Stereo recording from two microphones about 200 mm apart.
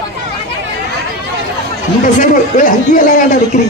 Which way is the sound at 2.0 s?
40° left (ahead or behind).